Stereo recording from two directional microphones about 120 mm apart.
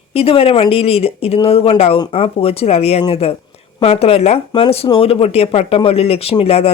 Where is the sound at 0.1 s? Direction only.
55° left (ahead or behind).